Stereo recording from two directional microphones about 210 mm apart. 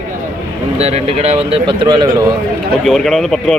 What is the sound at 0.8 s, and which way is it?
Speech, 30° right (ahead or behind).